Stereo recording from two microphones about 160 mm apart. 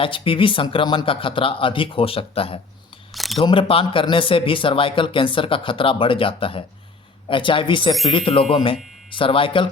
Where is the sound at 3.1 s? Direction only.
Centre (ahead or behind).